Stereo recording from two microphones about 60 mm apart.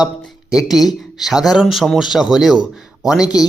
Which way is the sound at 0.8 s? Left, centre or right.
Centre.